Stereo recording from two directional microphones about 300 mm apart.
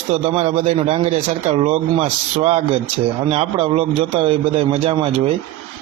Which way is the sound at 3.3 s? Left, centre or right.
Centre.